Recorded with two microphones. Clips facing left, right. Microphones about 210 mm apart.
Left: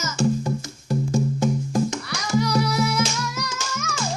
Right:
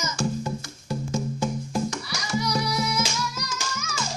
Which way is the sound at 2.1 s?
60° left (ahead or behind).